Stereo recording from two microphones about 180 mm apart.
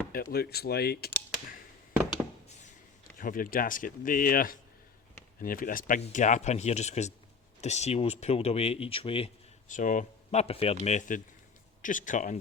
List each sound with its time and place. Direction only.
0.1 s speech: 55° left (ahead or behind)
3.2 s speech: 50° left (ahead or behind); by 9.3 s 30° left (ahead or behind)
9.6 s speech: 45° left (ahead or behind)